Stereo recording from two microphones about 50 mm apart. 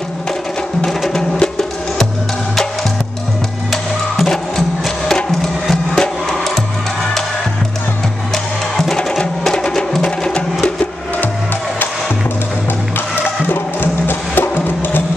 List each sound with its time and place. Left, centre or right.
0.8 s music: centre
3.7 s music: centre
9.4 s music: centre
13.1 s music: left